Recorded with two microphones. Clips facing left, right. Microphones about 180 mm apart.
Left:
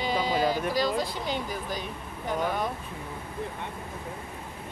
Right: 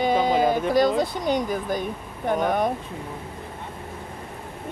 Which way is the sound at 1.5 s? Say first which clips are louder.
Right 8 dB; 50° right (ahead or behind).